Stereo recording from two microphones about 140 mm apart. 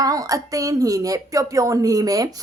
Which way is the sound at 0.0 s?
25° right (ahead or behind).